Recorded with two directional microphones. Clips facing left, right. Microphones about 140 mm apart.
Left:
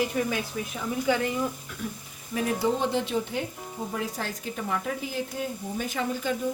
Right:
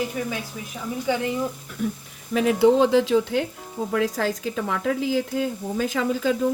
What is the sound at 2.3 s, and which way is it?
Speech, 80° right.